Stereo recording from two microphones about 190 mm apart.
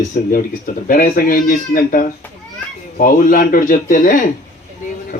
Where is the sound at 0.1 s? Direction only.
45° left (ahead or behind).